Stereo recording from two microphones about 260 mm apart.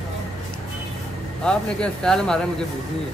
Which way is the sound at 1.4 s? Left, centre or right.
Centre.